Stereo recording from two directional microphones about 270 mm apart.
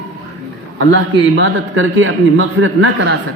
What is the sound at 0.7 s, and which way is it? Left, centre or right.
A man's voice, right.